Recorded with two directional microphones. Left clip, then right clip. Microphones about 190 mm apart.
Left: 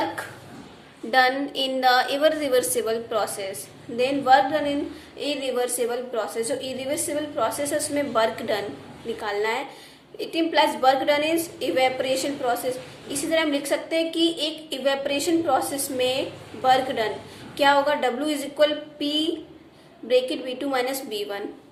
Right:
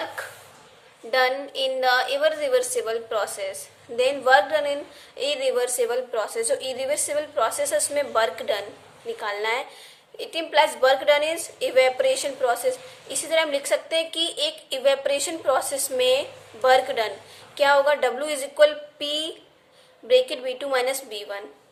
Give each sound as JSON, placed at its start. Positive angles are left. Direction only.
{"t": 1.1, "sound": "a woman's voice", "side_deg": -20}